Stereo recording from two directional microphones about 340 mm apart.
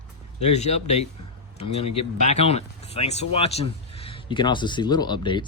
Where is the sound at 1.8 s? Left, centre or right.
Left.